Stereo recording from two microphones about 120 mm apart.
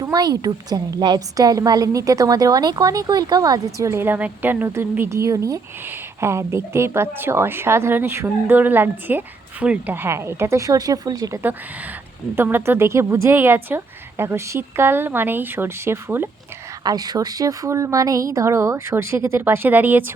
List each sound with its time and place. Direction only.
0.0 s a woman's voice: 30° right (ahead or behind)
12.4 s a woman's voice: 20° right (ahead or behind)
16.8 s a woman's voice: 35° right (ahead or behind); by 20.1 s 15° right (ahead or behind)